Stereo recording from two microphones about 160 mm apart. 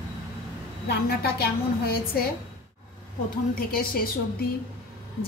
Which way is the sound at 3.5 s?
65° left (ahead or behind).